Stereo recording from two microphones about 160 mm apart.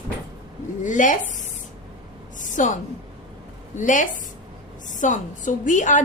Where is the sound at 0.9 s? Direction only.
50° left (ahead or behind).